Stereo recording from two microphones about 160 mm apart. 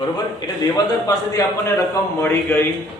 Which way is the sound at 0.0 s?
25° left (ahead or behind).